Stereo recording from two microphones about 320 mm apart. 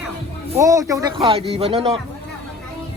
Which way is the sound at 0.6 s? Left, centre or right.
Centre.